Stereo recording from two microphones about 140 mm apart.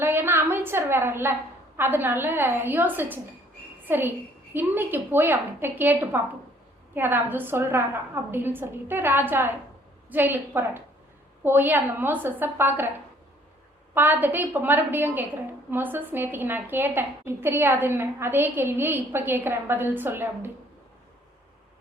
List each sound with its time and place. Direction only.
0.0 s a woman's voice: 15° right (ahead or behind)
13.9 s a woman's voice: 15° right (ahead or behind)